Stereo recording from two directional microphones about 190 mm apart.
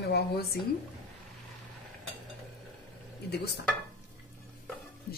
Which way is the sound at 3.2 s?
60° left (ahead or behind).